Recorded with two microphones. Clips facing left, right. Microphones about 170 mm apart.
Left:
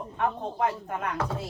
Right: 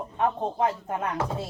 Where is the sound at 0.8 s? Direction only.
25° right (ahead or behind).